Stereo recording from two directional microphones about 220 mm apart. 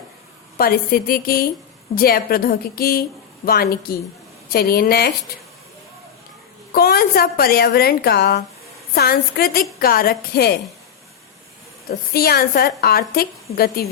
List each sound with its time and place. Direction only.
0.5 s a woman's voice: 45° left (ahead or behind)
6.7 s a woman's voice: 45° left (ahead or behind)
11.9 s a woman's voice: 45° left (ahead or behind)